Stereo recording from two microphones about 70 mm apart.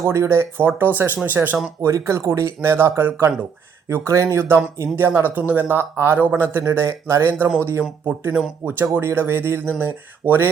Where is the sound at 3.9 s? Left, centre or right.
Right.